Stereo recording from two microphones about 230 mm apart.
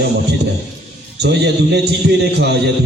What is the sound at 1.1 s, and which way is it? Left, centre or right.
A man's voice, right.